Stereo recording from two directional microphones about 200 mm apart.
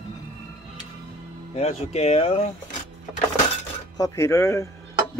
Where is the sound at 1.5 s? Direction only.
35° left (ahead or behind).